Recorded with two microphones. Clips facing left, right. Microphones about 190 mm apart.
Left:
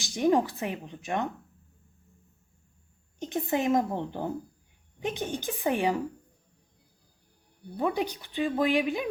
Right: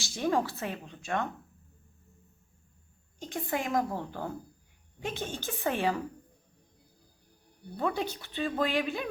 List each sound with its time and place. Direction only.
0.0 s speech: 15° left (ahead or behind)
3.2 s a woman's voice: 20° left (ahead or behind)
7.8 s speech: 15° left (ahead or behind)